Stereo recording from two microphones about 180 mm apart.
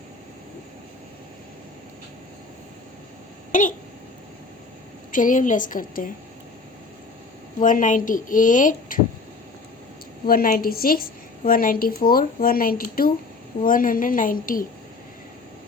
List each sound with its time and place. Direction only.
3.5 s speech: 45° left (ahead or behind)
5.1 s speech: 45° left (ahead or behind)
7.6 s speech: 45° left (ahead or behind)
10.2 s speech: 50° left (ahead or behind)